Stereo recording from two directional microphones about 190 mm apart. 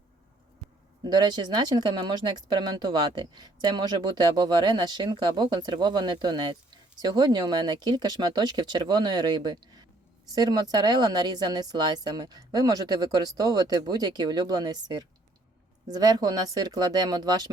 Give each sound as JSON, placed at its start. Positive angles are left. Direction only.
{"t": 1.0, "sound": "speech", "side_deg": -25}